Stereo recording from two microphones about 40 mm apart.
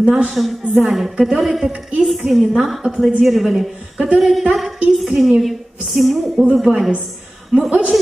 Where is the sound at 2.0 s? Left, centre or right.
Centre.